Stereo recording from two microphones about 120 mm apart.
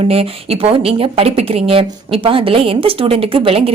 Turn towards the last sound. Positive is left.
turn(degrees=-50)  # may be behind; listen again after turning